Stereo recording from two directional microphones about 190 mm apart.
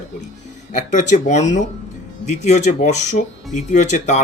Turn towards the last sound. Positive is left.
turn(degrees=40)  # may be behind; listen again after turning